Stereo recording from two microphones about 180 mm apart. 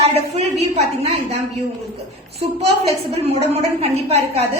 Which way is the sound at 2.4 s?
35° right (ahead or behind).